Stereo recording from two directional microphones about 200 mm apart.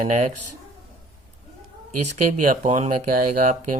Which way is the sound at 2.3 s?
40° right (ahead or behind).